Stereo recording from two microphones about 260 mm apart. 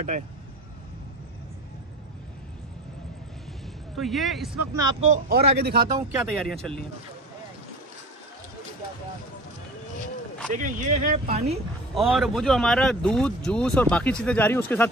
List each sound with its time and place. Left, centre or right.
3.9 s speech: centre
4.7 s speech: right
5.6 s speech: right
5.9 s speech: centre
6.3 s speech: centre
10.5 s speech: right
11.9 s speech: centre